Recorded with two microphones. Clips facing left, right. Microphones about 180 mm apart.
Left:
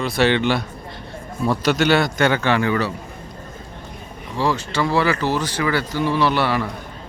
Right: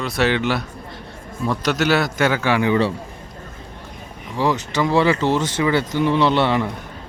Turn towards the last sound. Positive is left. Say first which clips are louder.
# right 2 dB
turn(degrees=-20)  # may be behind; listen again after turning